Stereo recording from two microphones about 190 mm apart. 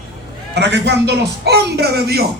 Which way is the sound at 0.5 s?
65° right (ahead or behind).